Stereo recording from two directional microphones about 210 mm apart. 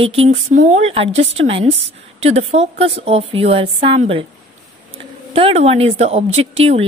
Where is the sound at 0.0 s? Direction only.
30° right (ahead or behind).